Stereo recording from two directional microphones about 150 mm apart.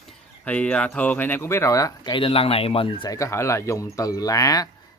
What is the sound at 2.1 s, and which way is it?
Speech, 40° left (ahead or behind).